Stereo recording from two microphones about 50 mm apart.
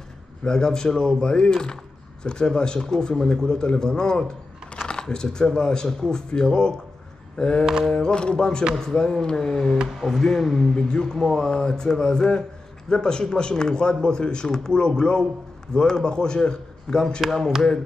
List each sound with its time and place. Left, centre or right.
0.4 s speech: centre